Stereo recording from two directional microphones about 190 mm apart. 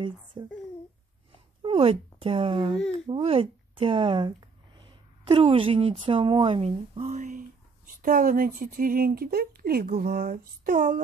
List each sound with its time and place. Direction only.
0.0 s a child's voice: 25° right (ahead or behind)
1.6 s speech: 30° right (ahead or behind); by 11.0 s 45° right (ahead or behind)